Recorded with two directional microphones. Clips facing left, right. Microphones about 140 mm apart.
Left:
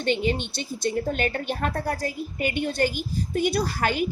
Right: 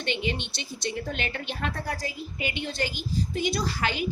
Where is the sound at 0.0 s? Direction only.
40° left (ahead or behind).